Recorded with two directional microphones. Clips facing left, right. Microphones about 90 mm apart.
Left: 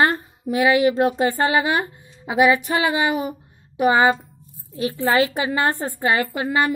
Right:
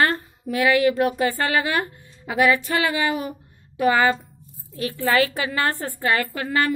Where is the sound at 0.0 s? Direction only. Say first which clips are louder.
Left 2 dB; 20° left (ahead or behind).